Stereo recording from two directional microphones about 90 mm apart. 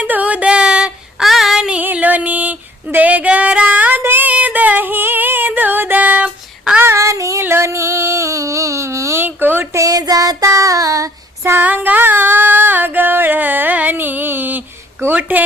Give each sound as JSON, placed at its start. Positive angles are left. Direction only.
{"t": 0.0, "sound": "child singing", "side_deg": -15}
{"t": 1.8, "sound": "female singing", "side_deg": -20}
{"t": 6.8, "sound": "child singing", "side_deg": -30}
{"t": 7.4, "sound": "a sound", "side_deg": -30}
{"t": 9.2, "sound": "a sound", "side_deg": -20}
{"t": 9.7, "sound": "child singing", "side_deg": -40}
{"t": 11.5, "sound": "music", "side_deg": -20}